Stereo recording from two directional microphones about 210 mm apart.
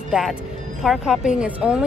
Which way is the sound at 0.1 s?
5° right (ahead or behind).